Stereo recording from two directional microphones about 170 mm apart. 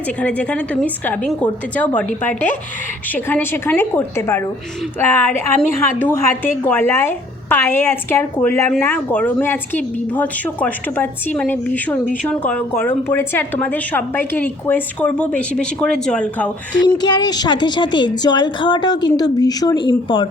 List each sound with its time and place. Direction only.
0.2 s speech: 10° left (ahead or behind)
16.8 s a woman's voice: 25° left (ahead or behind)